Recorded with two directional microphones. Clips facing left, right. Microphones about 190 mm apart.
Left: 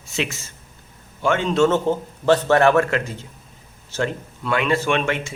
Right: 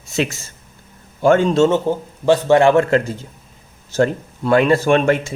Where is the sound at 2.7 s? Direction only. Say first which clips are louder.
Right 5 dB; 35° right (ahead or behind).